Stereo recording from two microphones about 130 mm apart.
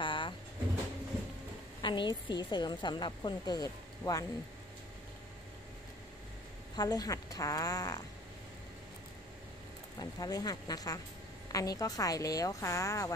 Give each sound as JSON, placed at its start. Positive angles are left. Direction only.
{"t": 0.0, "sound": "vehicle", "side_deg": 40}
{"t": 1.8, "sound": "a woman's voice", "side_deg": 35}
{"t": 6.8, "sound": "a woman's voice", "side_deg": 30}
{"t": 9.9, "sound": "a woman's voice", "side_deg": 30}